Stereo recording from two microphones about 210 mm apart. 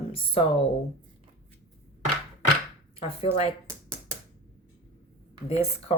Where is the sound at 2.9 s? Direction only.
25° left (ahead or behind).